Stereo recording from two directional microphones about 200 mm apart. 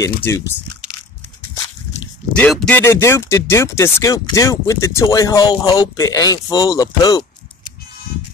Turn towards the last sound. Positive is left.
turn(degrees=20)  # may be behind; listen again after turning